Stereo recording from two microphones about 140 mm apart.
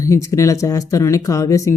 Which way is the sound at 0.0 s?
25° left (ahead or behind).